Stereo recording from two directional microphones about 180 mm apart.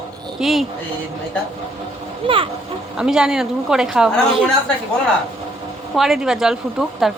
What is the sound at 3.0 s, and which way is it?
A woman's voice, 5° right (ahead or behind).